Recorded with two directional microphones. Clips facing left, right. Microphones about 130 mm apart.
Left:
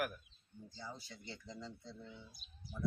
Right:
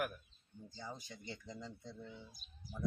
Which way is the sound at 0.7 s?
20° right (ahead or behind).